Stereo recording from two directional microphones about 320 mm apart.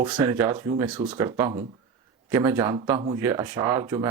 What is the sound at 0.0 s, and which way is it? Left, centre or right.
Speech, centre.